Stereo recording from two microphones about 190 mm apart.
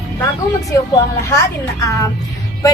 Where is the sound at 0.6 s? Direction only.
15° left (ahead or behind).